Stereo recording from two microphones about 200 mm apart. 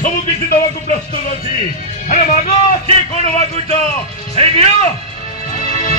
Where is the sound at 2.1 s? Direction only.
35° left (ahead or behind).